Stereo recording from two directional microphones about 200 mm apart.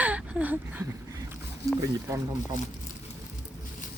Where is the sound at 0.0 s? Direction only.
5° right (ahead or behind).